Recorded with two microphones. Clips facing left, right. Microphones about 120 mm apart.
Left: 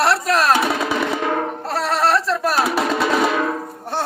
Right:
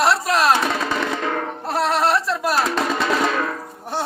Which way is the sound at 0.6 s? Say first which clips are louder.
Left 2 dB; 10° left (ahead or behind).